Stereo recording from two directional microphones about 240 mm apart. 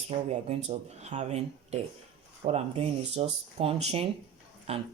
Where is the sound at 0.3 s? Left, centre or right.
Right.